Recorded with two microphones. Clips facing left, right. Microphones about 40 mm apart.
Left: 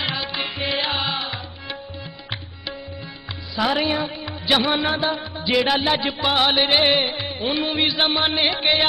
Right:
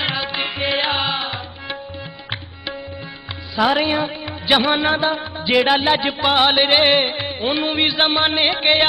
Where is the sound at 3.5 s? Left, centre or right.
Centre.